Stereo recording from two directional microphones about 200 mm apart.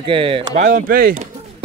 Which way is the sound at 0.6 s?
45° right (ahead or behind).